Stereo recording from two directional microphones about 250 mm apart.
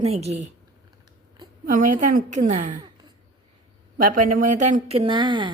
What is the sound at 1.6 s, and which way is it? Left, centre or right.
A woman's voice, right.